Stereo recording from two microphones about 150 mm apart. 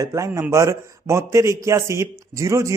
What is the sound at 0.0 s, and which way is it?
Speech, 20° right (ahead or behind).